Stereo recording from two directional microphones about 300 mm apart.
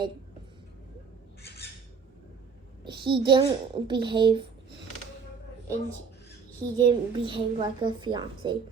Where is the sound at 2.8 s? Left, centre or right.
Centre.